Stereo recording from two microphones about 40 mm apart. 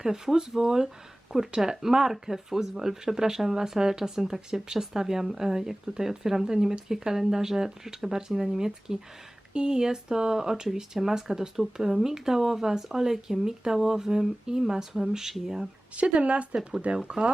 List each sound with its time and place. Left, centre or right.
0.0 s speech: centre
16.0 s speech: right
17.0 s speech: right